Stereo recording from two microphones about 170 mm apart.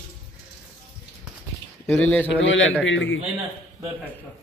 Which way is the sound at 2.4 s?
90° left.